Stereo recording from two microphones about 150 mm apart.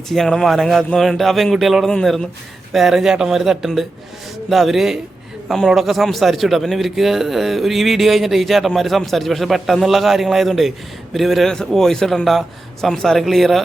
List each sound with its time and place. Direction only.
0.1 s speech: centre (ahead or behind)